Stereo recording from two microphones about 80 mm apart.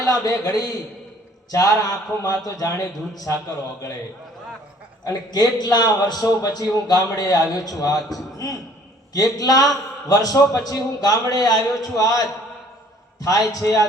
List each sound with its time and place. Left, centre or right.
0.0 s a man's voice: left
3.3 s a man's voice: left
5.0 s a man's voice: left